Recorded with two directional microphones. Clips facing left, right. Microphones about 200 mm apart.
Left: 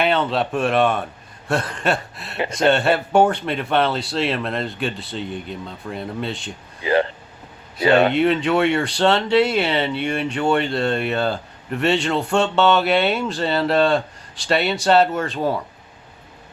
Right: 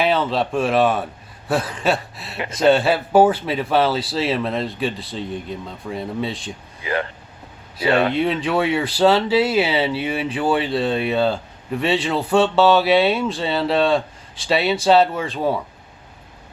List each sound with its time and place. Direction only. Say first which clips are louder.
0.0 s speech: even; centre (ahead or behind)
6.8 s speech: left 5 dB; 30° left (ahead or behind)
8.1 s speech: left 2 dB; centre (ahead or behind)